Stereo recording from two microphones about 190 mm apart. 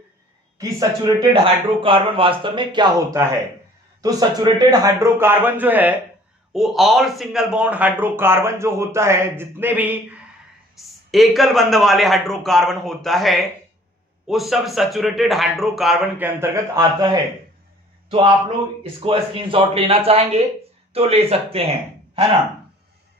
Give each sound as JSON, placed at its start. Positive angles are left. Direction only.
{"t": 0.6, "sound": "a man's voice", "side_deg": -20}
{"t": 16.7, "sound": "a man's voice", "side_deg": -20}